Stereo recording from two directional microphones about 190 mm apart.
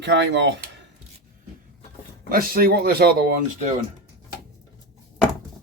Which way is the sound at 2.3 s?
50° right (ahead or behind).